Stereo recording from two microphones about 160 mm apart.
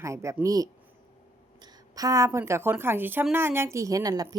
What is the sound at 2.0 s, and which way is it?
A woman's voice, 20° right (ahead or behind).